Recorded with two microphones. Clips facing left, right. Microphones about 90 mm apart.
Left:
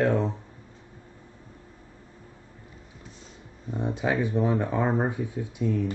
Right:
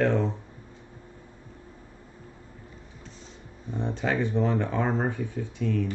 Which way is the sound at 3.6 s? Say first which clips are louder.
Left 1 dB; 10° left (ahead or behind).